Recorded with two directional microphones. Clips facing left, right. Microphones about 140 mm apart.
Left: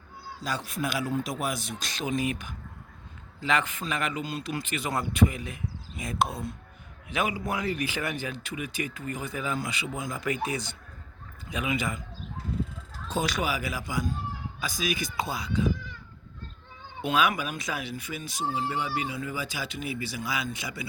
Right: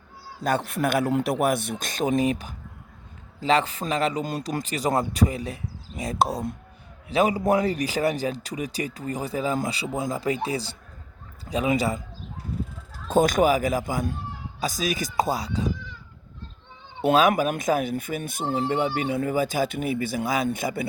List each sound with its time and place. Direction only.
0.4 s a man's voice: 55° right (ahead or behind); by 11.9 s 35° right (ahead or behind)
13.1 s speech: 50° right (ahead or behind)
17.0 s speech: 40° right (ahead or behind)